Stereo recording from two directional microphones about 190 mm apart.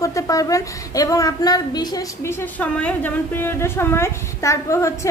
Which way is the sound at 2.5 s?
5° left (ahead or behind).